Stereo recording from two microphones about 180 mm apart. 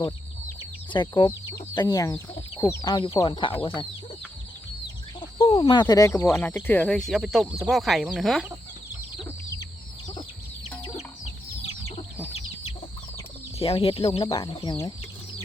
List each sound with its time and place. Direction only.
0.9 s speech: 25° left (ahead or behind)
5.5 s speech: 25° left (ahead or behind); by 8.5 s centre (ahead or behind)
13.6 s speech: 30° left (ahead or behind)
14.3 s speech: 25° left (ahead or behind)